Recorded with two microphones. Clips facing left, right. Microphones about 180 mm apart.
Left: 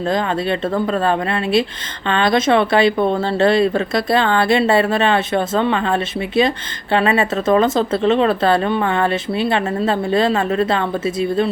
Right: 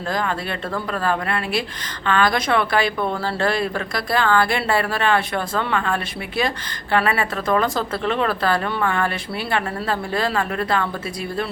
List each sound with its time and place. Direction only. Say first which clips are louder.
0.1 s speech: left 5 dB; 25° left (ahead or behind)